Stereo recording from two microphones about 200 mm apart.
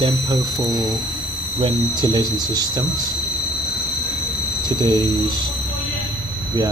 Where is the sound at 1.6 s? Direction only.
20° right (ahead or behind).